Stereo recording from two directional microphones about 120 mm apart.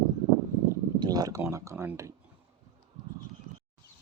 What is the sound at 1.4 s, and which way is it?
Speech, 25° right (ahead or behind).